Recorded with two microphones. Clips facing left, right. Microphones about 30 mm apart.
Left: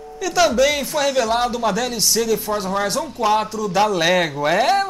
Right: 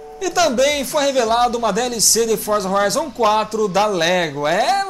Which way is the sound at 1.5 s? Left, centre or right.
Centre.